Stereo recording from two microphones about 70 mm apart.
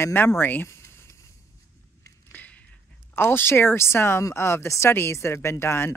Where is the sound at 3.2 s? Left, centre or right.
Left.